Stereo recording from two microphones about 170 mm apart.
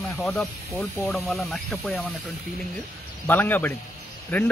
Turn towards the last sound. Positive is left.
turn(degrees=10)  # may be behind; listen again after turning